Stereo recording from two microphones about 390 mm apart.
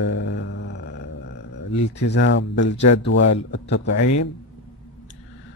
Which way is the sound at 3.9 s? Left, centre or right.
Left.